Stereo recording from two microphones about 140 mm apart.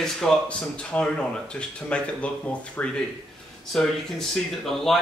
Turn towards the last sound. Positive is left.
turn(degrees=0)  # may be behind; listen again after turning